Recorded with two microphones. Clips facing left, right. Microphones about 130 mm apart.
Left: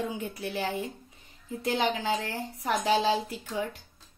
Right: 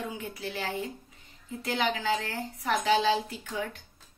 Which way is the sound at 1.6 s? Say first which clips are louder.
Left 1 dB; 30° left (ahead or behind).